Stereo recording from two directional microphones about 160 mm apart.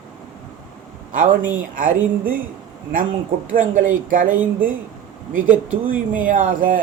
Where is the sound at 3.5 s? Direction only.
55° right (ahead or behind).